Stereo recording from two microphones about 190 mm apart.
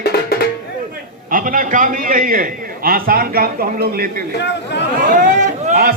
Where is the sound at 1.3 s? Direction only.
45° right (ahead or behind).